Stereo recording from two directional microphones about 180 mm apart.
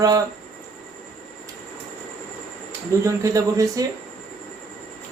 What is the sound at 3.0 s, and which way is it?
Speech, 15° right (ahead or behind).